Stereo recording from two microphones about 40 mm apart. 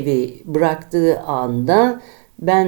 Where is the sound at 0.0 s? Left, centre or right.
Centre.